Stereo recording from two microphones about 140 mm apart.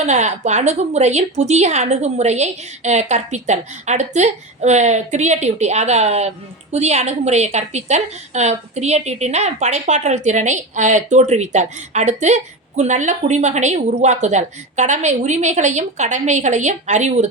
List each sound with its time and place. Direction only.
0.0 s a woman's voice: 55° right (ahead or behind)